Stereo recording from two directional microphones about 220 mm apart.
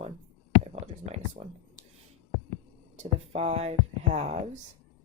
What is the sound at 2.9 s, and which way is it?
Speech, 30° right (ahead or behind).